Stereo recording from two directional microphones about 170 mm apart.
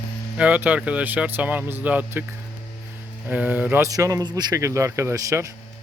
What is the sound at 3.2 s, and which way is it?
Speech, 10° right (ahead or behind).